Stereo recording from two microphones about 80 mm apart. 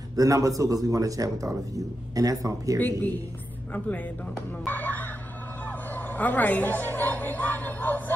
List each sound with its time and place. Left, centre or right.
0.1 s speech: right
2.8 s a woman's voice: left